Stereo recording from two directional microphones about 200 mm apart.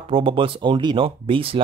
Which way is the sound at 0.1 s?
25° right (ahead or behind).